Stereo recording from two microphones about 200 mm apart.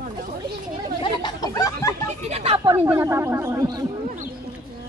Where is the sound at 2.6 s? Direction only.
10° right (ahead or behind).